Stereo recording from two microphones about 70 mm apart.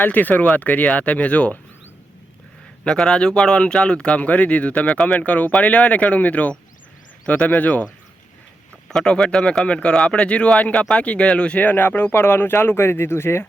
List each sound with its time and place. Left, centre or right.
0.0 s speech: left
2.8 s speech: centre
8.9 s speech: centre; by 13.5 s left